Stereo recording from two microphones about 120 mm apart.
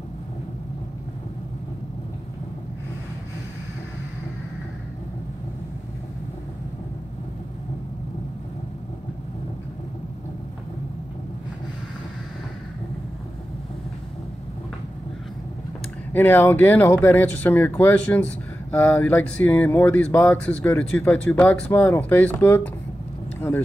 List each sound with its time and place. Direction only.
16.1 s speech: 15° left (ahead or behind)